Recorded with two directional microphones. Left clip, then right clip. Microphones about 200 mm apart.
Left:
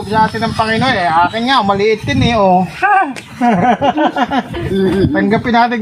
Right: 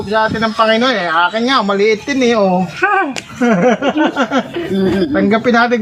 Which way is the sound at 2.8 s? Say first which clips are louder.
Left 1 dB; 20° left (ahead or behind).